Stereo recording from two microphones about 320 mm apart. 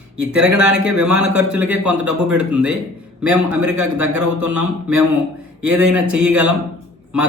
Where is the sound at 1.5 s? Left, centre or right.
Centre.